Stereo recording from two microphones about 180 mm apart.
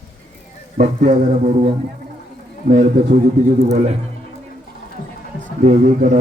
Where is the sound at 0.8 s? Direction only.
40° right (ahead or behind).